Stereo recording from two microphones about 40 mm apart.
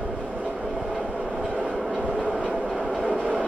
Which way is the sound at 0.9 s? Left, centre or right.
Centre.